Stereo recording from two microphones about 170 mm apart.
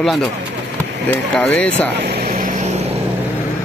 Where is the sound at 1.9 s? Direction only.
70° right (ahead or behind); by 2.9 s 40° right (ahead or behind).